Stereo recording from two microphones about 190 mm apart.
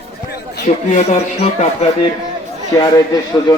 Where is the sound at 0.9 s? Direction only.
35° left (ahead or behind).